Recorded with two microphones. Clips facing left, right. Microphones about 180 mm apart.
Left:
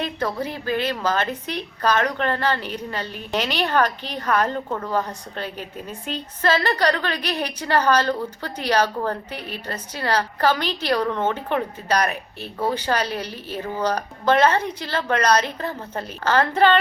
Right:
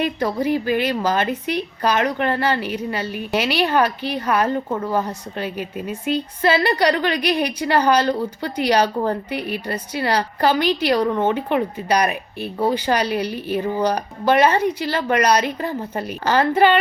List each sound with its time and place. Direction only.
0.0 s a woman's voice: 10° right (ahead or behind)